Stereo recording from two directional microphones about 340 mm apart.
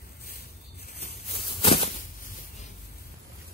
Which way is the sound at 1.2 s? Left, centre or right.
Centre.